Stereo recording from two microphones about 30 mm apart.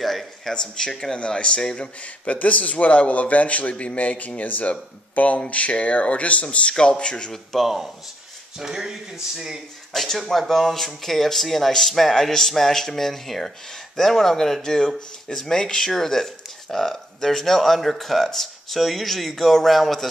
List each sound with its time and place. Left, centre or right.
0.0 s a sound: centre
0.5 s speech: left
1.1 s speech: left
1.8 s a man's voice: left
4.4 s a man's voice: left
6.7 s speech: left
7.6 s speech: centre
9.9 s speech: centre
14.6 s speech: left; by 20.1 s centre